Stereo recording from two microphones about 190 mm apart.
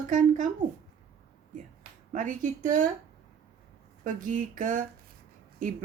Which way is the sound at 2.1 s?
40° right (ahead or behind).